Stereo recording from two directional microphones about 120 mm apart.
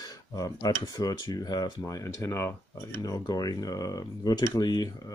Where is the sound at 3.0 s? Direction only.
30° left (ahead or behind).